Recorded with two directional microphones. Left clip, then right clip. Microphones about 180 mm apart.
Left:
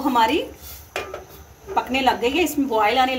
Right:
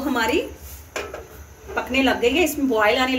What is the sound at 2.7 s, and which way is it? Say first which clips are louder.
Speech: left 1 dB; 55° left (ahead or behind).